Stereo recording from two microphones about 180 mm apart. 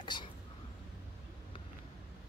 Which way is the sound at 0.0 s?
25° left (ahead or behind).